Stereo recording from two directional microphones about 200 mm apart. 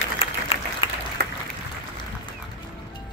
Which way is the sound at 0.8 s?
30° left (ahead or behind).